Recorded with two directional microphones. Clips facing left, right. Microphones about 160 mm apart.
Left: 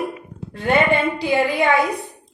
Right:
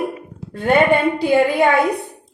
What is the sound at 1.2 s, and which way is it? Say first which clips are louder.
Speech: right 4 dB; 55° right (ahead or behind).